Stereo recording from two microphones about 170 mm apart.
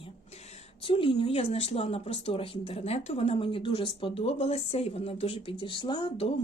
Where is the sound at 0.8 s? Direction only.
30° left (ahead or behind).